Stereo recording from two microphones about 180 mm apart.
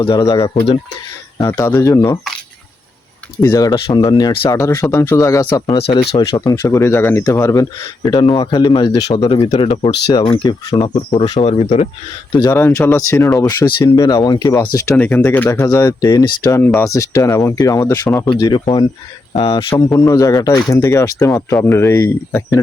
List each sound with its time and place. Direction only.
0.0 s speech: 25° left (ahead or behind)
3.4 s speech: 20° left (ahead or behind); by 11.9 s 40° left (ahead or behind)
12.4 s speech: 15° left (ahead or behind); by 19.6 s 30° left (ahead or behind)
19.7 s speech: 15° left (ahead or behind)